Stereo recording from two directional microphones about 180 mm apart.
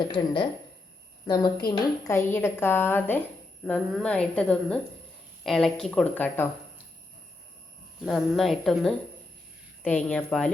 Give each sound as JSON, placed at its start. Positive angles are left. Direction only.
{"t": 0.0, "sound": "a woman's voice", "side_deg": 25}
{"t": 8.0, "sound": "a woman's voice", "side_deg": 0}